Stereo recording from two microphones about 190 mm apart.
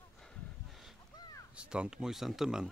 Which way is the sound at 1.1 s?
20° left (ahead or behind).